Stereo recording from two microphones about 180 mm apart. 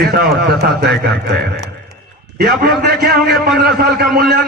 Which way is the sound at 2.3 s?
55° right (ahead or behind).